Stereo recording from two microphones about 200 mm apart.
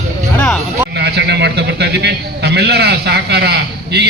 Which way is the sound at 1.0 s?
55° right (ahead or behind).